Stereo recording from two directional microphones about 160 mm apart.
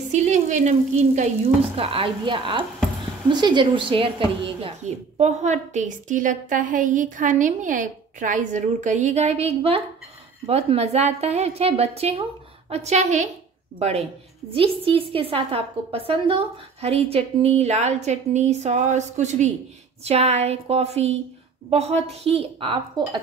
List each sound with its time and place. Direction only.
0.1 s a woman's voice: 45° right (ahead or behind)
4.8 s a woman's voice: 45° right (ahead or behind)